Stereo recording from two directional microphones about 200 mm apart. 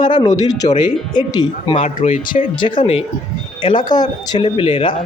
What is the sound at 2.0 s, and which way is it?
Speech, 40° left (ahead or behind).